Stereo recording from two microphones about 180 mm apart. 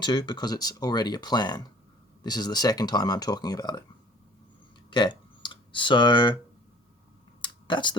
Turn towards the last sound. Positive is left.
turn(degrees=25)  # may be behind; listen again after turning